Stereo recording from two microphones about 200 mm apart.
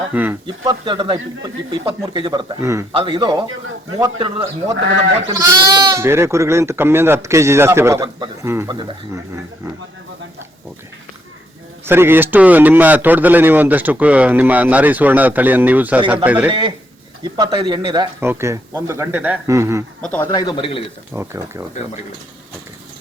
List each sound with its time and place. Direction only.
0.1 s speech: 10° right (ahead or behind)
0.4 s a man's voice: 20° right (ahead or behind)
2.9 s a man's voice: 25° right (ahead or behind)
5.3 s speech: 15° right (ahead or behind)
11.9 s speech: 10° right (ahead or behind)
16.5 s a man's voice: 25° right (ahead or behind)
18.2 s speech: 10° right (ahead or behind)
20.0 s speech: 5° left (ahead or behind)
20.3 s speech: 20° left (ahead or behind)
21.1 s speech: 10° right (ahead or behind)